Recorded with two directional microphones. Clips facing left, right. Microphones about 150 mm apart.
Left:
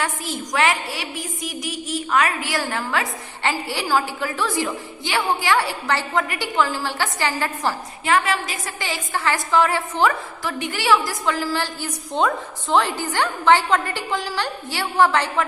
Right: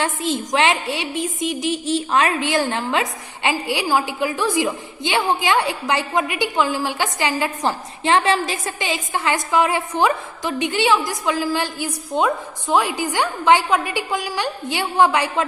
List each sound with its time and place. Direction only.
0.0 s a woman's voice: 25° right (ahead or behind)